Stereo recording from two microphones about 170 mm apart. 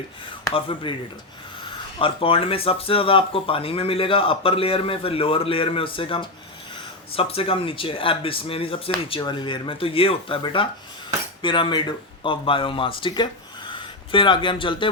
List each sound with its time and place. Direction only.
0.5 s speech: 30° left (ahead or behind)
2.0 s speech: 30° left (ahead or behind)